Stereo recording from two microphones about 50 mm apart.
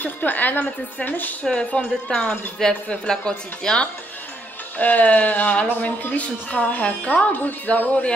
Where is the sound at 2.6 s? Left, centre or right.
Centre.